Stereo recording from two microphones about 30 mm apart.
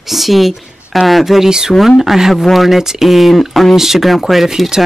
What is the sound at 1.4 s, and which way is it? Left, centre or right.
Speech, right.